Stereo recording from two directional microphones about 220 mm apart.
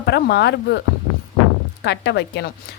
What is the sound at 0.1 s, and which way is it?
Speech, 50° left (ahead or behind).